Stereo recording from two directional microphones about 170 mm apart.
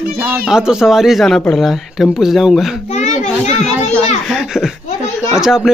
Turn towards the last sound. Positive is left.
turn(degrees=-5)  # may be behind; listen again after turning